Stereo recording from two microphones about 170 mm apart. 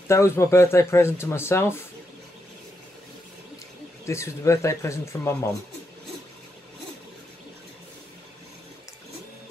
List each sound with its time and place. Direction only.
0.1 s speech: 15° left (ahead or behind)
4.0 s speech: 15° left (ahead or behind)